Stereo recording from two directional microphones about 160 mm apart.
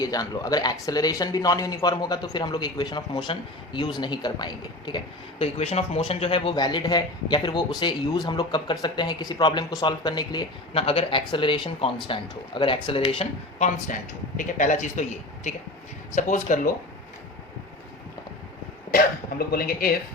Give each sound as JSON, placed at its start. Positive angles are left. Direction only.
{"t": 0.0, "sound": "a man's voice", "side_deg": 25}
{"t": 5.5, "sound": "a man's voice", "side_deg": 40}
{"t": 14.3, "sound": "a man's voice", "side_deg": 50}
{"t": 18.9, "sound": "speech", "side_deg": 70}